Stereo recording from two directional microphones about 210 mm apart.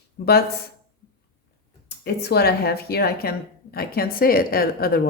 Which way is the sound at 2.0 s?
50° left (ahead or behind).